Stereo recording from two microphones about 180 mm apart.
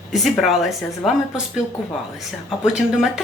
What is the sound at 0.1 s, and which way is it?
A woman's voice, centre (ahead or behind).